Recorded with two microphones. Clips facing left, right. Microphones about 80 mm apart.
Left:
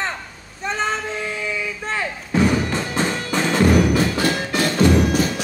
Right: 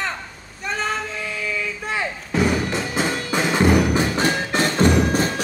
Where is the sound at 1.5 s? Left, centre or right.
Centre.